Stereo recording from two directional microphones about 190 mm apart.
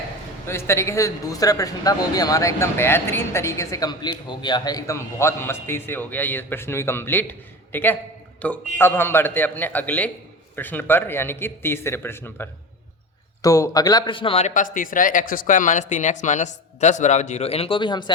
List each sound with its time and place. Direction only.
0.4 s a man's voice: 15° left (ahead or behind)